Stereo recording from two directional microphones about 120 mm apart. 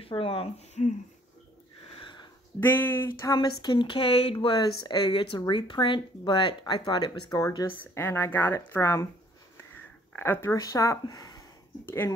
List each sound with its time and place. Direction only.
0.0 s speech: 45° left (ahead or behind)
2.0 s a sound: 40° left (ahead or behind)
2.6 s speech: 15° left (ahead or behind)
3.3 s a woman's voice: 35° left (ahead or behind)
4.6 s speech: 35° left (ahead or behind)
7.7 s speech: 15° left (ahead or behind)
10.1 s speech: 15° left (ahead or behind)
11.8 s speech: 20° left (ahead or behind)